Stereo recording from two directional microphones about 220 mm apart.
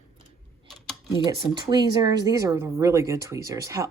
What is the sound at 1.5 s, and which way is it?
Speech, 20° right (ahead or behind).